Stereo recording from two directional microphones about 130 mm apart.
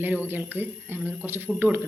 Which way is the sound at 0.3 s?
15° right (ahead or behind).